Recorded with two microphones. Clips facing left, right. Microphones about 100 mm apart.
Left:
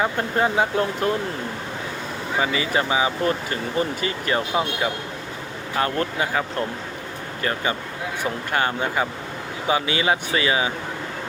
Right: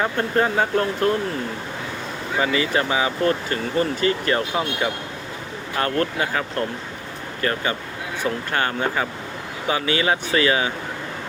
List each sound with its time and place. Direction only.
0.0 s speech: 10° left (ahead or behind)
2.4 s speech: 20° left (ahead or behind)